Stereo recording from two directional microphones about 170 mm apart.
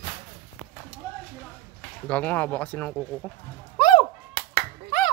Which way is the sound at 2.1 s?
10° left (ahead or behind).